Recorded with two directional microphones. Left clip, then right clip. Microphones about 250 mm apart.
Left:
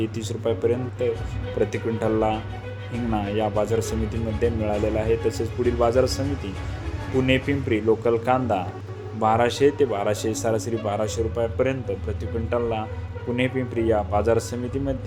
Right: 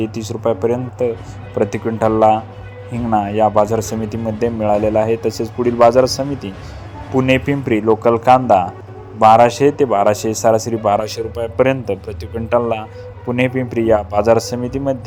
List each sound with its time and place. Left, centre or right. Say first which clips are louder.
0.0 s a man's voice: right 7 dB; centre